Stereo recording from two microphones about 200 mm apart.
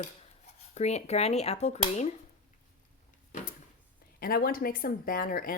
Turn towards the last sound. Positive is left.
turn(degrees=45)  # may be behind; listen again after turning